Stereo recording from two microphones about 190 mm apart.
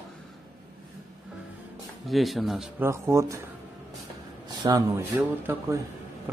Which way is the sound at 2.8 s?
15° right (ahead or behind).